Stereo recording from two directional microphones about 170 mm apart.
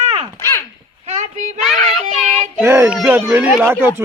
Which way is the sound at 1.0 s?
45° right (ahead or behind).